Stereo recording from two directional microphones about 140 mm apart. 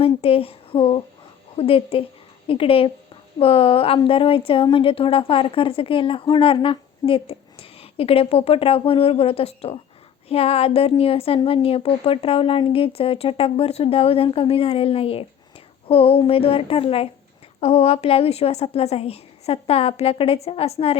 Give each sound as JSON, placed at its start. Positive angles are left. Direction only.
{"t": 0.0, "sound": "a woman's voice", "side_deg": 45}